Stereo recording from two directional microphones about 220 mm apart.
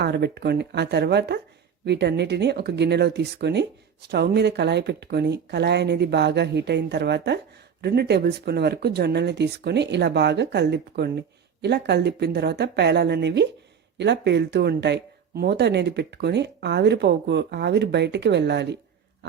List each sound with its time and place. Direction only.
0.0 s speech: 50° right (ahead or behind)